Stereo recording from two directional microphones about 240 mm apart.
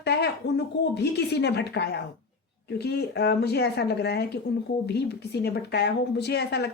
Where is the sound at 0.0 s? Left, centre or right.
Left.